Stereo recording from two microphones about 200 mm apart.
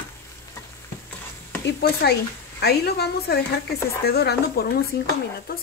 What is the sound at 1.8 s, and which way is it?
Speech, 55° left (ahead or behind).